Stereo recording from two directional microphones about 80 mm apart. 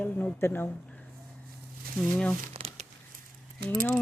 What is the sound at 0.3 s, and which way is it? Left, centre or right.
Speech, left.